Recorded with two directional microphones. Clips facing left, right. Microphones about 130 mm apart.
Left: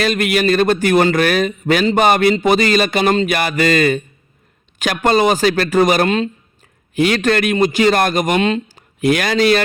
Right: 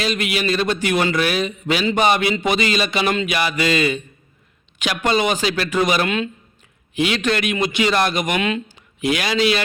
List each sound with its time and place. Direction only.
0.0 s a man's voice: 50° left (ahead or behind); by 8.6 s 35° left (ahead or behind)
8.7 s a man's voice: 45° left (ahead or behind)